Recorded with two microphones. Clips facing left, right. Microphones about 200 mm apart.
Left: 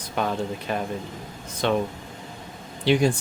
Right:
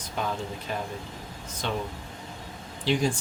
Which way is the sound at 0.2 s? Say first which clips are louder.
Left 5 dB; 65° left (ahead or behind).